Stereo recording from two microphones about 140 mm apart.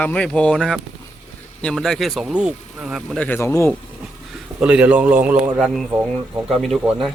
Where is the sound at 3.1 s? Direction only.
10° left (ahead or behind).